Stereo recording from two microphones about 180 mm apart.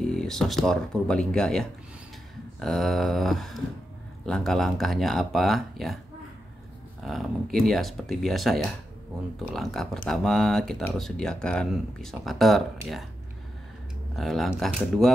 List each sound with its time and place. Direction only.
0.0 s speech: 5° left (ahead or behind)
7.6 s speech: centre (ahead or behind)
14.1 s speech: centre (ahead or behind)